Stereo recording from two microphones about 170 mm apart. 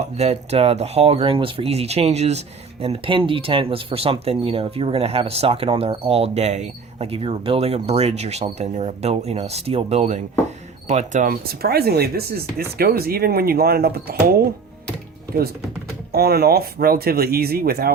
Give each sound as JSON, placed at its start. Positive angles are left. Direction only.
{"t": 0.0, "sound": "speech", "side_deg": -40}
{"t": 16.1, "sound": "speech", "side_deg": -65}